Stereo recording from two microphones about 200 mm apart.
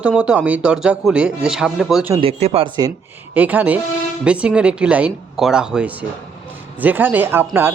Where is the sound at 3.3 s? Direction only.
10° right (ahead or behind).